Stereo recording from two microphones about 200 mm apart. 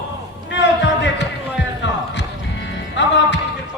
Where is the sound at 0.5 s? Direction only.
60° left (ahead or behind).